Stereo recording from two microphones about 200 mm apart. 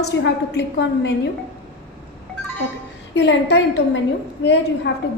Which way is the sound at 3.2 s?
60° left (ahead or behind).